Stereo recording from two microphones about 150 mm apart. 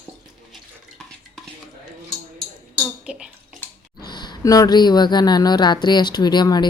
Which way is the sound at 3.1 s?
5° right (ahead or behind).